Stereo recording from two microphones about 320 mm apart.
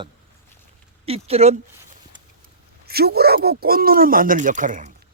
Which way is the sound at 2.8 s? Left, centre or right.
Right.